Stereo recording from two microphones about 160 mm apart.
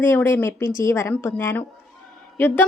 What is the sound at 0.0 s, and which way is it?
A woman's voice, 15° left (ahead or behind).